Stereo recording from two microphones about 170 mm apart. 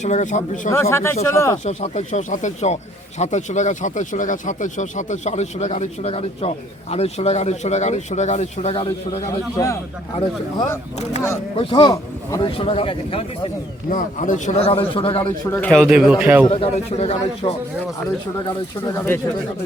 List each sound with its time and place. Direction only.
0.0 s speech: 45° left (ahead or behind)
0.7 s speech: 15° left (ahead or behind)
1.6 s speech: 40° left (ahead or behind)
9.6 s speech: 20° left (ahead or behind)
11.6 s speech: 30° left (ahead or behind)
13.9 s speech: 45° left (ahead or behind)
15.5 s speech: 10° left (ahead or behind)
15.8 s a man's voice: 5° right (ahead or behind)
16.5 s speech: 35° left (ahead or behind)
18.9 s speech: 15° left (ahead or behind)